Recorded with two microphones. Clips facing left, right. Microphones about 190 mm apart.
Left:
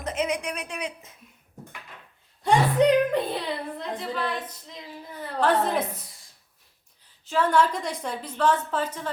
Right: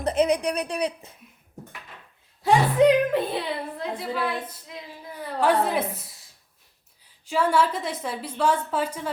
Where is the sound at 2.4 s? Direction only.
Centre (ahead or behind).